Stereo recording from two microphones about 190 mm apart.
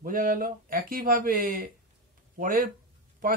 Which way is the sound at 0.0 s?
45° right (ahead or behind).